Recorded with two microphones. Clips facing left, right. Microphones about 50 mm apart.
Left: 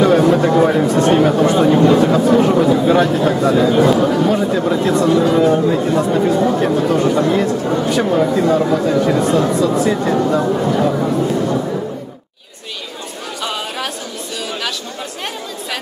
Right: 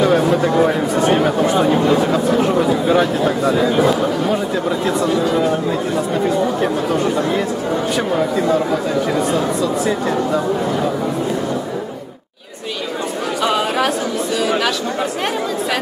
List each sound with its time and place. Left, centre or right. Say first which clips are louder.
0.0 s speech: left 3 dB; centre
13.4 s chatter: right 6 dB; right